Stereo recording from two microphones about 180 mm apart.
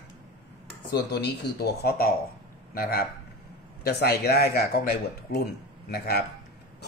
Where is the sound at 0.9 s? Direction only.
65° left (ahead or behind).